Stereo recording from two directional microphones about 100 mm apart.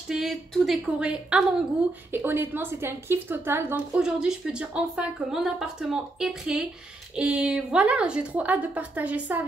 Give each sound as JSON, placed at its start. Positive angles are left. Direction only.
{"t": 0.1, "sound": "a woman's voice", "side_deg": 0}
{"t": 2.2, "sound": "a woman's voice", "side_deg": -20}
{"t": 3.9, "sound": "a woman's voice", "side_deg": -5}